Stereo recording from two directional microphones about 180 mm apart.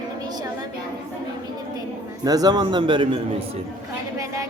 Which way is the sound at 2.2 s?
20° right (ahead or behind).